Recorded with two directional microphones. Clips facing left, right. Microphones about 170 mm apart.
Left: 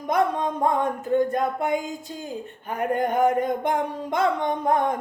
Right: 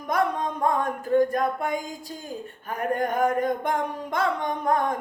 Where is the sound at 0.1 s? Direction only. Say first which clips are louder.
Left 2 dB; 25° left (ahead or behind).